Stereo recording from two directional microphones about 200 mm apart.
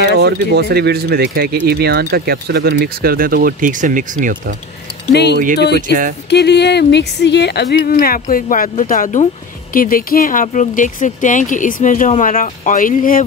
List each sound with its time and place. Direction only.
0.2 s speech: 55° right (ahead or behind)
5.1 s speech: 55° left (ahead or behind)
5.8 s speech: 40° right (ahead or behind)
6.3 s speech: 55° left (ahead or behind)